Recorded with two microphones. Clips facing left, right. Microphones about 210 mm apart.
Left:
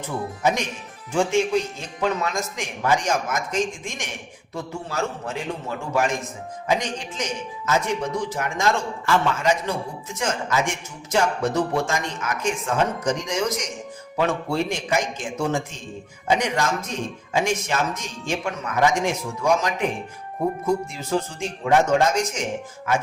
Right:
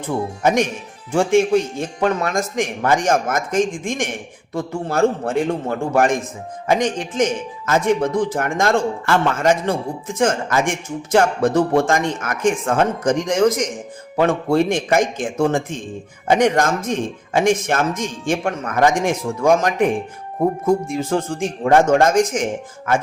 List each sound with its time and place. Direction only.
0.4 s speech: 50° right (ahead or behind)